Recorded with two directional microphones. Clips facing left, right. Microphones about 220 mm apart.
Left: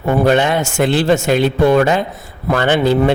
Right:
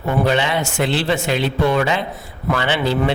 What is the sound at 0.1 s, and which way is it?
A man's voice, 50° left (ahead or behind).